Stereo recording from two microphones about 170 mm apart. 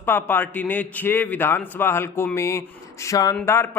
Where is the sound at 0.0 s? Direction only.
15° left (ahead or behind).